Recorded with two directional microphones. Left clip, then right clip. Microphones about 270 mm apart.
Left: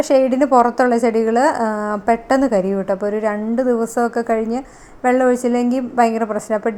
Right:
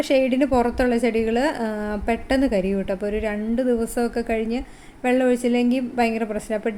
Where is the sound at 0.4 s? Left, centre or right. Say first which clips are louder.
Left 7 dB; centre.